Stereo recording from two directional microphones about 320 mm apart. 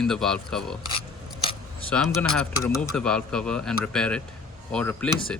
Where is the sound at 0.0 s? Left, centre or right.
Centre.